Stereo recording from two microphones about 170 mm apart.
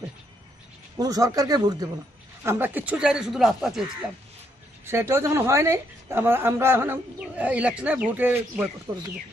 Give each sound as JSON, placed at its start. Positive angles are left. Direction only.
{"t": 0.9, "sound": "speech", "side_deg": -20}
{"t": 2.4, "sound": "speech", "side_deg": -10}
{"t": 4.8, "sound": "a woman's voice", "side_deg": -15}